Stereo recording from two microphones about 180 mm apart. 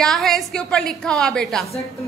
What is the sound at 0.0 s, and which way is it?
A woman's voice, centre (ahead or behind).